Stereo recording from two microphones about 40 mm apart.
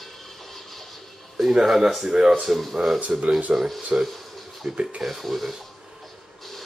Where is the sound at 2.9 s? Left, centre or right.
Right.